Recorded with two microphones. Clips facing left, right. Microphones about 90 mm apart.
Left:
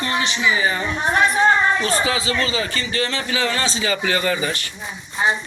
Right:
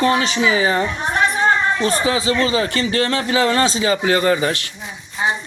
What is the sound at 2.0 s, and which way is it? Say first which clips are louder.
Speech: right 4 dB; 35° right (ahead or behind).